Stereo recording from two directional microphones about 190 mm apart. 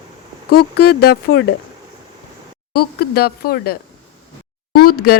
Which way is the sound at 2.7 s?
55° left (ahead or behind).